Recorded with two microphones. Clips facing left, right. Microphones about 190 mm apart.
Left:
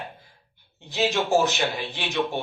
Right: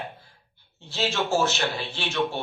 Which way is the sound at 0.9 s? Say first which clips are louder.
Left 3 dB; 15° left (ahead or behind).